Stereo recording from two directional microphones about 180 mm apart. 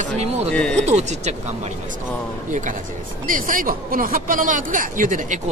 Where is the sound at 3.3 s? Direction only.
50° right (ahead or behind).